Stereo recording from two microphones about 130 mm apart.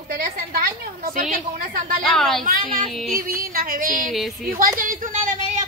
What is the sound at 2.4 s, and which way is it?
Music, 90° right.